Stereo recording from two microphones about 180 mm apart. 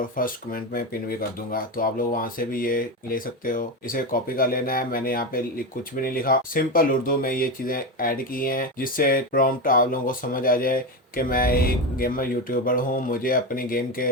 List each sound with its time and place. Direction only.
0.2 s speech: 55° left (ahead or behind)